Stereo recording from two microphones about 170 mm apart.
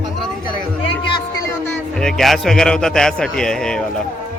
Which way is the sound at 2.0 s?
Centre (ahead or behind).